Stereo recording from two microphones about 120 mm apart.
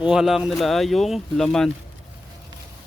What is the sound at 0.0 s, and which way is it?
Speech, 5° right (ahead or behind).